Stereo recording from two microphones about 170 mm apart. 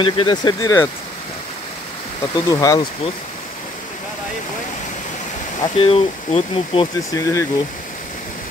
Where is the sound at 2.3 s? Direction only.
20° left (ahead or behind).